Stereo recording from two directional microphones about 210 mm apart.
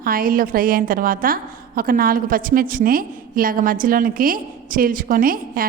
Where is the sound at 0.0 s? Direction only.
45° right (ahead or behind).